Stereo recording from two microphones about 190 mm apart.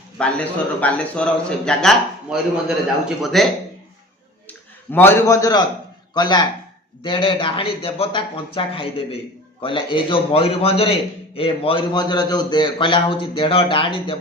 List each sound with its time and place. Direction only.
0.2 s a man's voice: 5° left (ahead or behind); by 14.2 s 25° left (ahead or behind)